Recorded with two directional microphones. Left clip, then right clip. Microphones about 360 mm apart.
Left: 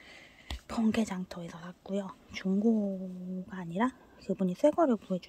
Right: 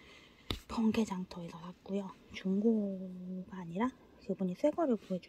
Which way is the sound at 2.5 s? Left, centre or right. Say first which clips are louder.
Left 2 dB; left.